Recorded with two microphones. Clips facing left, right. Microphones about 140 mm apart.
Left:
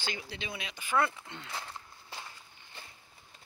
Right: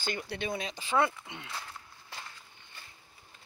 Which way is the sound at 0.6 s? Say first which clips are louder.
Right 6 dB; 35° right (ahead or behind).